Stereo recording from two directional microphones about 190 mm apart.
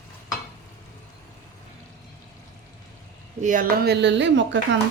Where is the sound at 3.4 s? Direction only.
45° right (ahead or behind); by 4.5 s 70° right (ahead or behind).